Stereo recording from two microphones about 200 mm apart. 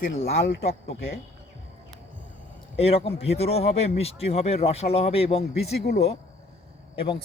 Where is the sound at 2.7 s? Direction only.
30° left (ahead or behind).